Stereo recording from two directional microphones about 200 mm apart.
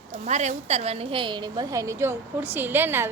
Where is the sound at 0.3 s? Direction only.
35° right (ahead or behind).